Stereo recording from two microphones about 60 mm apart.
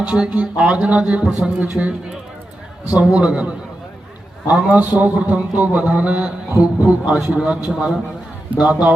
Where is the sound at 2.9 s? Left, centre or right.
Centre.